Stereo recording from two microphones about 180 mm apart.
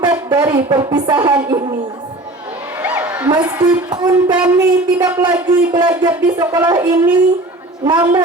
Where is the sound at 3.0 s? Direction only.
10° right (ahead or behind).